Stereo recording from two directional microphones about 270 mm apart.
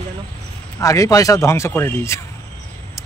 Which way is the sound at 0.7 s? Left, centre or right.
Centre.